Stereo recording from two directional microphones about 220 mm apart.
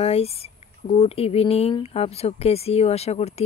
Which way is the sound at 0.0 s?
25° left (ahead or behind).